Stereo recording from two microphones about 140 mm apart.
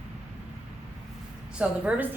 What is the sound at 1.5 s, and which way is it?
Speech, 10° right (ahead or behind).